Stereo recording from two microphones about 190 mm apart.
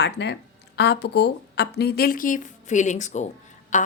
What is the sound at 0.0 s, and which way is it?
A woman's voice, 65° left (ahead or behind).